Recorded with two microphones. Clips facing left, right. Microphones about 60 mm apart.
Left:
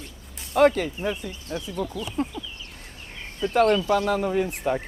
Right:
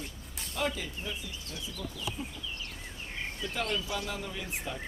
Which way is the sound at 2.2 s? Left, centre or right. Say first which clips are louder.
Left 13 dB; left.